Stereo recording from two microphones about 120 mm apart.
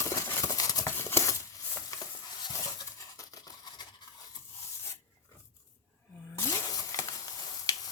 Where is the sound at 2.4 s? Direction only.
30° left (ahead or behind).